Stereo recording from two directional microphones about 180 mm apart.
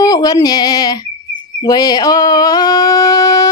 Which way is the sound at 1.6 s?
20° left (ahead or behind).